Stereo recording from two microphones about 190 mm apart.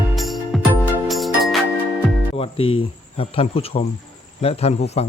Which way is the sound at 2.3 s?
30° left (ahead or behind).